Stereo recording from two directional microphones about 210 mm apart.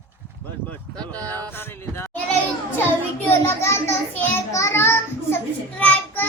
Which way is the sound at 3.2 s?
10° left (ahead or behind).